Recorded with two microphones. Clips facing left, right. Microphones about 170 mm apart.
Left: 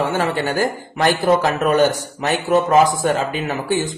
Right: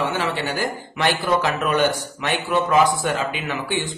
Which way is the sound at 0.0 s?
45° left (ahead or behind).